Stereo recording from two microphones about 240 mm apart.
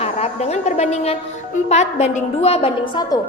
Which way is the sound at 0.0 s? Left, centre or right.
Left.